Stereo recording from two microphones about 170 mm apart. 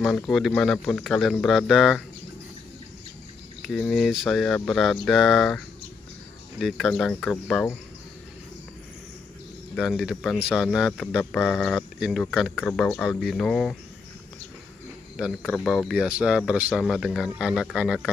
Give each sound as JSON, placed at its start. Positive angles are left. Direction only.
{"t": 0.0, "sound": "a man's voice", "side_deg": 5}
{"t": 3.6, "sound": "a man's voice", "side_deg": 0}
{"t": 6.6, "sound": "a man's voice", "side_deg": 0}
{"t": 9.8, "sound": "a man's voice", "side_deg": 0}
{"t": 15.4, "sound": "a man's voice", "side_deg": 5}